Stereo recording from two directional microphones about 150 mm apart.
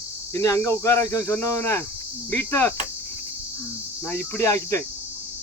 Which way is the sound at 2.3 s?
10° left (ahead or behind).